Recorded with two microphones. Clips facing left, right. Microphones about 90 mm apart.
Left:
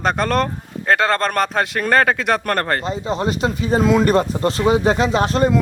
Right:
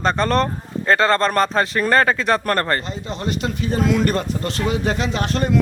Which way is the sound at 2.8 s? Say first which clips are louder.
Left 5 dB; 40° left (ahead or behind).